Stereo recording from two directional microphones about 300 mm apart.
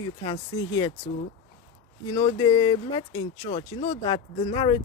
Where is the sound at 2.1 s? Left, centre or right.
Centre.